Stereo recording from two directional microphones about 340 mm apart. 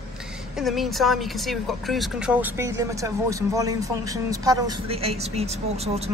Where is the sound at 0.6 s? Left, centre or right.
Centre.